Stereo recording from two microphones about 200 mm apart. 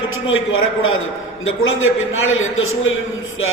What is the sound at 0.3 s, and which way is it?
A man's voice, 85° left.